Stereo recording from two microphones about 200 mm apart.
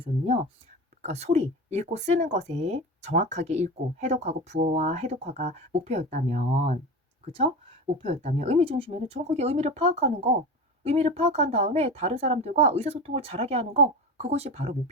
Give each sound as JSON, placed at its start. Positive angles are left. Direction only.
{"t": 0.0, "sound": "speech", "side_deg": -30}
{"t": 7.9, "sound": "speech", "side_deg": -30}